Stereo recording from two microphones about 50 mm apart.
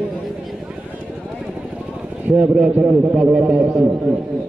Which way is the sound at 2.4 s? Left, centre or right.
Right.